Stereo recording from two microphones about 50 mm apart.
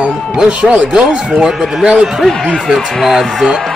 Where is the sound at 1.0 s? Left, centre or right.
Centre.